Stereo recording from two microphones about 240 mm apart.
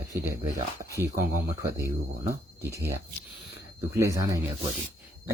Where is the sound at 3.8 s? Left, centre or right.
Centre.